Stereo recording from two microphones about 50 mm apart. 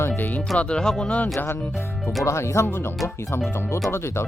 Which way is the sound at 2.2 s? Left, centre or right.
Left.